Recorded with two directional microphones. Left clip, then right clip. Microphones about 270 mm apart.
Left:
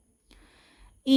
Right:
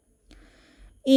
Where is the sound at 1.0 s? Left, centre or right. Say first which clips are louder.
Right 4 dB; centre.